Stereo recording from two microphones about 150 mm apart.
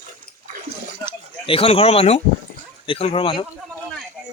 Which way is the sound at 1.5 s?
40° left (ahead or behind).